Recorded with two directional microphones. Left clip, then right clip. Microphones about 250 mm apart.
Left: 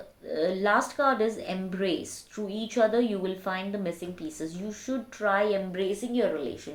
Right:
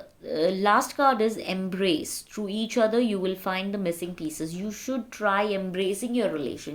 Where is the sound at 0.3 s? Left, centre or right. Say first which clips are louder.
Right 3 dB; right.